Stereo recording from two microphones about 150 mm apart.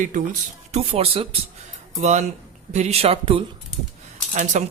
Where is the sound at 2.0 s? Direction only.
50° right (ahead or behind).